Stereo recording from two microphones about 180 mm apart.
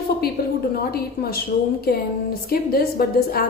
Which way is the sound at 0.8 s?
60° left (ahead or behind).